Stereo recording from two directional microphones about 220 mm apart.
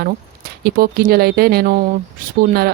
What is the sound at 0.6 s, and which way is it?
Speech, 45° right (ahead or behind).